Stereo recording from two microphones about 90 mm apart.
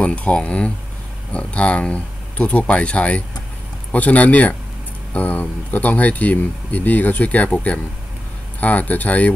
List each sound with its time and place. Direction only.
0.0 s speech: 15° left (ahead or behind)